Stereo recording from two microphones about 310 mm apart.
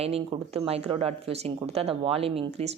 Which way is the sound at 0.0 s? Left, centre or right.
Centre.